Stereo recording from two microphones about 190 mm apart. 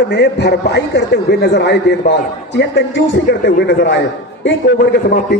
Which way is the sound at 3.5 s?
55° left (ahead or behind).